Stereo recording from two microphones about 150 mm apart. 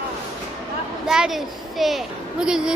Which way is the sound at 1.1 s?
5° right (ahead or behind).